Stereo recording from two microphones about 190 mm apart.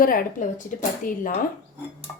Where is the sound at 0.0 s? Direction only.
50° left (ahead or behind).